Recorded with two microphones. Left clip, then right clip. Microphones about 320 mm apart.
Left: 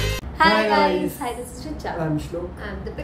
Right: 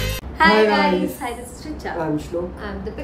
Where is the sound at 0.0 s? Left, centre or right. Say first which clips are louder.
Right 2 dB; centre.